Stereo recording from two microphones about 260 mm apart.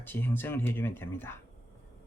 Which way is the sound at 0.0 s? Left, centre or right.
Centre.